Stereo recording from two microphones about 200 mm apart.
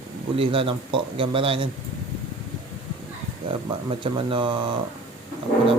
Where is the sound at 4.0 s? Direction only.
25° right (ahead or behind).